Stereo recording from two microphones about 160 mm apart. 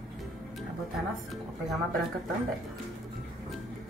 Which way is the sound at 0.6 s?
Centre (ahead or behind).